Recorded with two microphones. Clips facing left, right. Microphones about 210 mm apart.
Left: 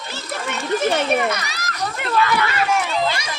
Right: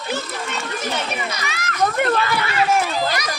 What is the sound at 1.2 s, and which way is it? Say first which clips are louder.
Children playing: left 6 dB; 55° left (ahead or behind).